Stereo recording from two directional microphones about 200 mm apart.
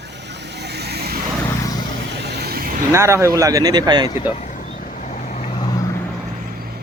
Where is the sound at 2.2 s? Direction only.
55° right (ahead or behind).